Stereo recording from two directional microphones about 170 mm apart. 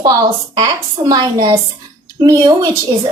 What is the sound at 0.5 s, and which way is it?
A woman's voice, 25° right (ahead or behind).